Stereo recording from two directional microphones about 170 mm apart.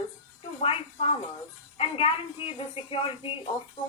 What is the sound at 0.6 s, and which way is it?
A woman's voice, 35° left (ahead or behind).